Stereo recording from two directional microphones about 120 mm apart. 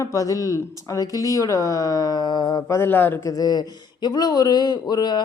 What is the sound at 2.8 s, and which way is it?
A man's voice, 20° left (ahead or behind).